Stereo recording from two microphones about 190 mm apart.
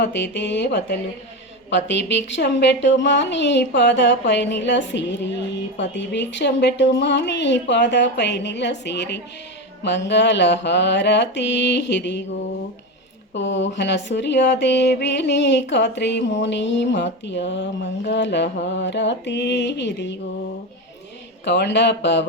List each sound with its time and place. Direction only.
0.0 s a woman's voice: 65° left (ahead or behind)
13.3 s speech: 70° left (ahead or behind)
21.4 s speech: 65° left (ahead or behind)